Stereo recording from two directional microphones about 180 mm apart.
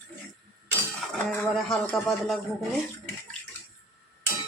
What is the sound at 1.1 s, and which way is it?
Speech, 5° left (ahead or behind).